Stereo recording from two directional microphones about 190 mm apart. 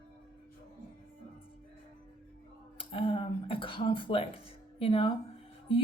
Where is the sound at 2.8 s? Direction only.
30° left (ahead or behind).